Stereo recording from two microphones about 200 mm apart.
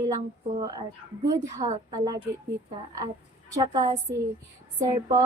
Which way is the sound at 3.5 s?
20° right (ahead or behind).